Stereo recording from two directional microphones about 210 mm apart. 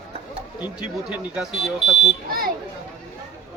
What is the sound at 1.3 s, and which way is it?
Speech, centre (ahead or behind).